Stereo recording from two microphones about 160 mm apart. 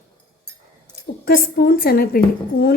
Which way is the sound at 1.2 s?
65° left (ahead or behind).